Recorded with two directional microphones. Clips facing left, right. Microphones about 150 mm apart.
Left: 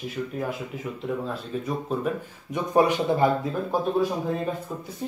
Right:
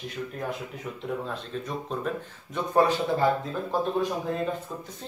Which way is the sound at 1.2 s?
5° left (ahead or behind).